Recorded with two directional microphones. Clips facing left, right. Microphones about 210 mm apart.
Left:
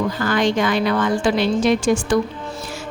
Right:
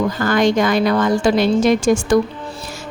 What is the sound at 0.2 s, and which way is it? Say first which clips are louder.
A woman's voice: right 4 dB; 45° right (ahead or behind).